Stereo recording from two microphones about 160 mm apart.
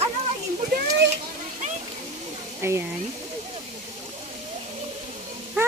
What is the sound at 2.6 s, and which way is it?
Speech, 15° right (ahead or behind).